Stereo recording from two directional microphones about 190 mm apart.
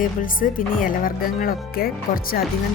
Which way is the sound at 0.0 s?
45° left (ahead or behind).